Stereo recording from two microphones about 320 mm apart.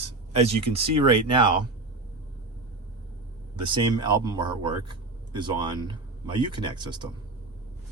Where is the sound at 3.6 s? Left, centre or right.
Centre.